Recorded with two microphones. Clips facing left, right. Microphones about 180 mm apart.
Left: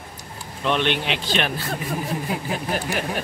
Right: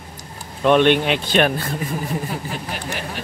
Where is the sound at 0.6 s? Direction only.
50° right (ahead or behind).